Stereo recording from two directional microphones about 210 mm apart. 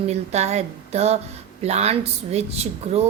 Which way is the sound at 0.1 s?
30° right (ahead or behind).